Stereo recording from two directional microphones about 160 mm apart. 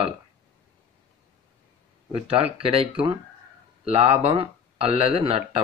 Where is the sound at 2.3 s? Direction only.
35° right (ahead or behind).